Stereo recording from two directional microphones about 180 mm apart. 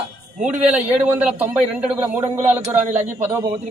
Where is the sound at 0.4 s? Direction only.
10° right (ahead or behind).